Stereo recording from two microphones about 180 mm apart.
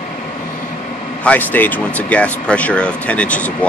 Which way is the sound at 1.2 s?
10° left (ahead or behind).